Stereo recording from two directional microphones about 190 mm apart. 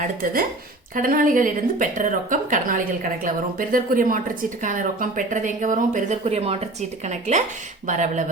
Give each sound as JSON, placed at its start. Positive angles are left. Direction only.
{"t": 0.0, "sound": "speech", "side_deg": -50}